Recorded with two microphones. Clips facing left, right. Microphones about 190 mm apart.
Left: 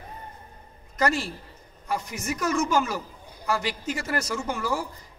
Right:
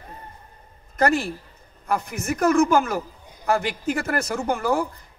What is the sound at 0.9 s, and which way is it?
A man's voice, 55° right (ahead or behind).